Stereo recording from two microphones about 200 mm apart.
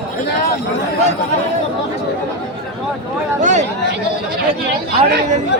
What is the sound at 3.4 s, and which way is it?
Speech, 35° right (ahead or behind).